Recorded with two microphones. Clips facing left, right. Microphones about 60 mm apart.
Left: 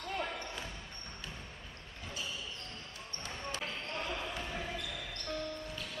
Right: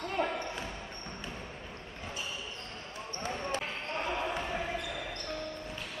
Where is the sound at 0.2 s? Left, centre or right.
Right.